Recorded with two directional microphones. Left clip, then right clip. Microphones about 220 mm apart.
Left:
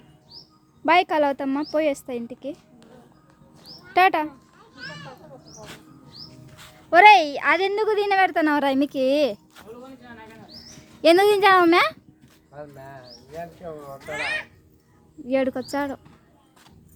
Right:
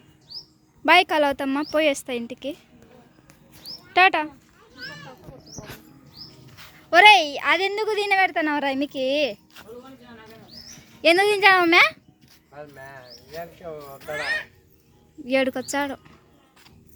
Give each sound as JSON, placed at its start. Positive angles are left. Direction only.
{"t": 0.9, "sound": "a woman's voice", "side_deg": 0}
{"t": 3.9, "sound": "a woman's voice", "side_deg": 10}
{"t": 6.6, "sound": "a woman's voice", "side_deg": 5}
{"t": 11.0, "sound": "a woman's voice", "side_deg": 20}
{"t": 12.5, "sound": "speech", "side_deg": -35}
{"t": 15.3, "sound": "a woman's voice", "side_deg": 0}